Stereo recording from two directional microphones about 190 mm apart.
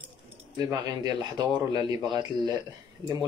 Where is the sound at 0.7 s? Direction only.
20° right (ahead or behind).